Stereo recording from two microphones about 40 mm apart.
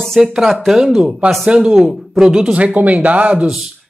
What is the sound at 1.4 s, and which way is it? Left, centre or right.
Speech, right.